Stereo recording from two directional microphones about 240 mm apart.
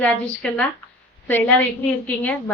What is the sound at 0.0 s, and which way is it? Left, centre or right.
A woman's voice, centre.